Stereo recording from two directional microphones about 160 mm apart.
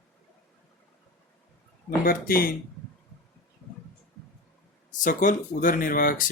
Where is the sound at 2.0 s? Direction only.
65° left (ahead or behind).